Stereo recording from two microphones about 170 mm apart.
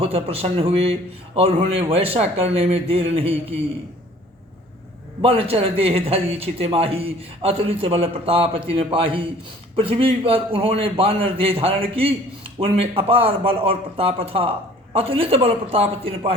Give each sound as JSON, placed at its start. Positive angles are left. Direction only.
{"t": 0.0, "sound": "a man's voice", "side_deg": -35}
{"t": 5.2, "sound": "a man's voice", "side_deg": -35}